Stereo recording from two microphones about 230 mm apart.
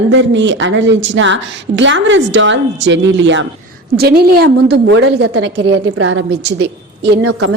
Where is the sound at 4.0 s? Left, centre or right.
Right.